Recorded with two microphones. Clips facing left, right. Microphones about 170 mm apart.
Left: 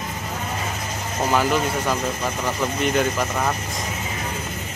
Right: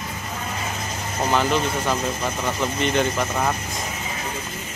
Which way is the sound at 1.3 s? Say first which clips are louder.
Left 1 dB; 5° left (ahead or behind).